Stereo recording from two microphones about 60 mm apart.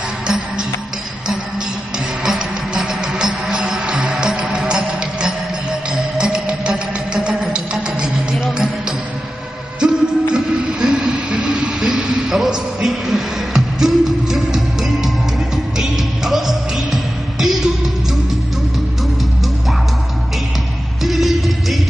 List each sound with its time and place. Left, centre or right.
2.2 s music: centre
9.8 s music: centre
21.0 s music: centre